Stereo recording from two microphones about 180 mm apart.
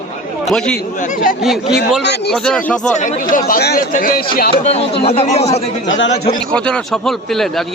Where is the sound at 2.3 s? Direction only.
5° left (ahead or behind).